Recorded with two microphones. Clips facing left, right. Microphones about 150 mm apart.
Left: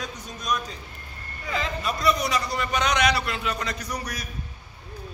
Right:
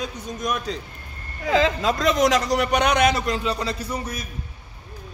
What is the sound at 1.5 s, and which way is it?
A man's voice, 90° right.